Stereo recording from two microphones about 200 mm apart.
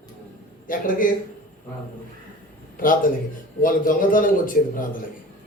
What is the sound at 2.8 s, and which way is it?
A man's voice, 45° left (ahead or behind).